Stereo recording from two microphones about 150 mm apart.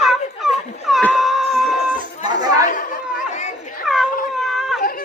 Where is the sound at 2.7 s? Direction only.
65° left (ahead or behind).